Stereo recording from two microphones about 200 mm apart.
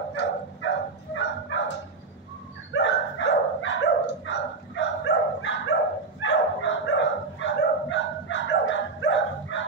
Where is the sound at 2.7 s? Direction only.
70° left (ahead or behind).